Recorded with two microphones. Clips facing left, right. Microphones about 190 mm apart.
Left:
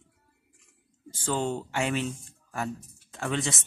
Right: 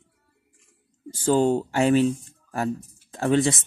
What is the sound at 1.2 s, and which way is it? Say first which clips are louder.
Speech: right 9 dB; 40° right (ahead or behind).